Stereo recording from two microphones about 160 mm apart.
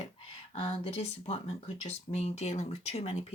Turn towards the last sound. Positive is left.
turn(degrees=40)  # may be behind; listen again after turning